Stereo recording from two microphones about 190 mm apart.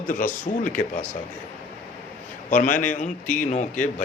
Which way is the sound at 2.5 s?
45° left (ahead or behind).